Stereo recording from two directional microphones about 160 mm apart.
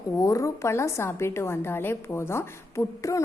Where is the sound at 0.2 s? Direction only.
20° left (ahead or behind).